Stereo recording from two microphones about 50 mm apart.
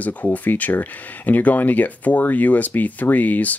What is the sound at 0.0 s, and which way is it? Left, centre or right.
Speech, left.